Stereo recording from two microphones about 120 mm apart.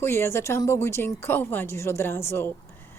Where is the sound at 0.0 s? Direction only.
20° left (ahead or behind).